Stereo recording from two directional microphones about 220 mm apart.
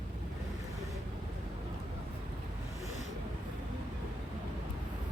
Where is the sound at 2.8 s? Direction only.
30° left (ahead or behind).